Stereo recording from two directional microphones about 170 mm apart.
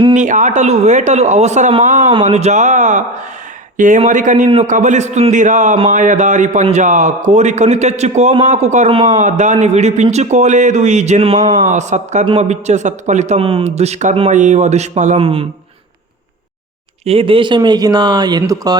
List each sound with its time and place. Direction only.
0.1 s a man's voice: 45° right (ahead or behind)
9.1 s a man's voice: 45° right (ahead or behind); by 11.6 s 30° right (ahead or behind)
11.7 s a man's voice: 45° right (ahead or behind)
17.1 s speech: 35° right (ahead or behind)